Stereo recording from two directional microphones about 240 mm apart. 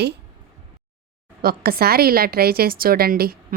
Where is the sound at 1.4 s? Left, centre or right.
Right.